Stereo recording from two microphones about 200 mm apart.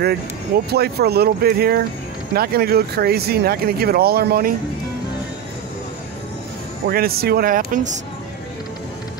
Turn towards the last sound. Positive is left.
turn(degrees=-45)  # may be behind; listen again after turning